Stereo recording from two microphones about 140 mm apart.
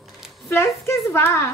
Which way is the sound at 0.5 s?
20° left (ahead or behind).